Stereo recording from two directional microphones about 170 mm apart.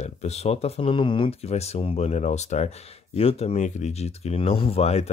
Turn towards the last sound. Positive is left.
turn(degrees=40)  # may be behind; listen again after turning